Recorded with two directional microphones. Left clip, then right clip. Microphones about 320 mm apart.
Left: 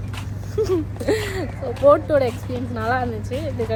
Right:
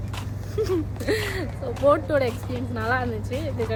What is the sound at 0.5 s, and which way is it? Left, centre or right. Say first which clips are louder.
Speech: left 4 dB; centre.